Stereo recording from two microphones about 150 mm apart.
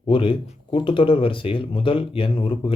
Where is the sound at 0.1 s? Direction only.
35° left (ahead or behind).